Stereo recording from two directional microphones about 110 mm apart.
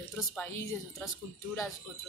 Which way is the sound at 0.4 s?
25° left (ahead or behind).